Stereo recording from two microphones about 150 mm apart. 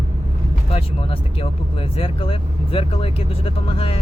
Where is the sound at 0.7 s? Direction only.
40° left (ahead or behind).